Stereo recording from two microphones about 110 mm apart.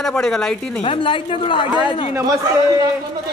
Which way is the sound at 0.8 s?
55° left (ahead or behind).